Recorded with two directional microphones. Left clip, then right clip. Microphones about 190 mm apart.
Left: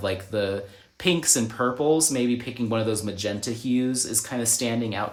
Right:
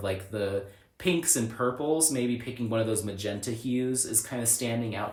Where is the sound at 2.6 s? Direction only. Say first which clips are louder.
Left 3 dB; 45° left (ahead or behind).